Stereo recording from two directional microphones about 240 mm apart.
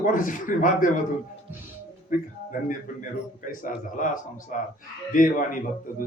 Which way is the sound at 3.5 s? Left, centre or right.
Left.